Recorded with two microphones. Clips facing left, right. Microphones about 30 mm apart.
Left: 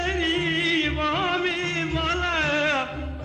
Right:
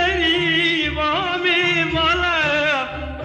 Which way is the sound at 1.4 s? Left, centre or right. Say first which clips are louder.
Right 8 dB; right.